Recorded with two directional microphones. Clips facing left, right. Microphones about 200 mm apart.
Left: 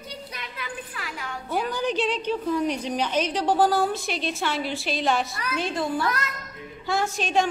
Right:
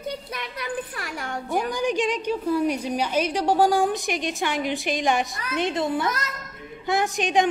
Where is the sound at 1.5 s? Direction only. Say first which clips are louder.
Right 1 dB; 15° right (ahead or behind).